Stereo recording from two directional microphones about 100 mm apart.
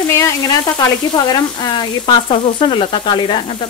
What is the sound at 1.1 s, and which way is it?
Frying, 45° left (ahead or behind).